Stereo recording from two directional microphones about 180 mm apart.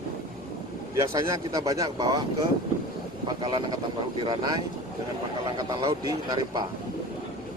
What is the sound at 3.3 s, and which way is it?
A man's voice, 20° right (ahead or behind).